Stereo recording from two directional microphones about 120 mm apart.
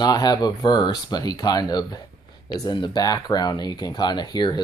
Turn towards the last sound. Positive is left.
turn(degrees=35)  # may be behind; listen again after turning